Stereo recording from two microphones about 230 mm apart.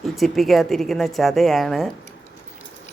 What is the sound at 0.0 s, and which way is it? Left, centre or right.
Speech, centre.